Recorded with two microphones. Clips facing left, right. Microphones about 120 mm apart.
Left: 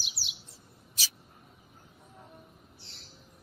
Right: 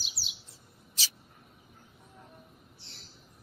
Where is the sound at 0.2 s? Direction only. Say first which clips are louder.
Left 1 dB; centre (ahead or behind).